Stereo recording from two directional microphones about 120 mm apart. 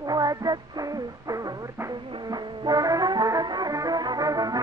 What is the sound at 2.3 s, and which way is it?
Music, 30° right (ahead or behind).